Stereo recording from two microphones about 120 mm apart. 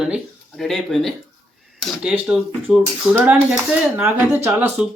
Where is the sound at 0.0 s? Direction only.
Centre (ahead or behind); by 4.7 s 20° right (ahead or behind).